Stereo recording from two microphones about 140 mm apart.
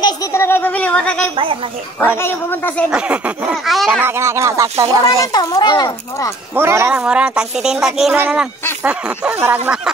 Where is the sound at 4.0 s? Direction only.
20° right (ahead or behind).